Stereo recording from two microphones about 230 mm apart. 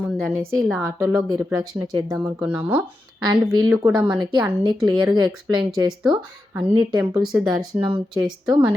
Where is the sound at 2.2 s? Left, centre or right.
Centre.